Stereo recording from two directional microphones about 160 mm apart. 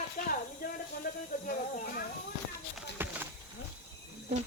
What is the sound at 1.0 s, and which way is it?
Snake, 60° left (ahead or behind).